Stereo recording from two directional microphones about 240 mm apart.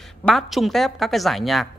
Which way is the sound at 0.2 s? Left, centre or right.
Centre.